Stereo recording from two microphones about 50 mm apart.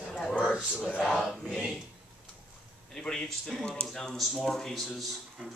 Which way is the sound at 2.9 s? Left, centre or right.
Centre.